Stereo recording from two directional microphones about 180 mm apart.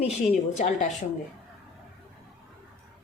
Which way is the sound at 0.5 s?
40° left (ahead or behind).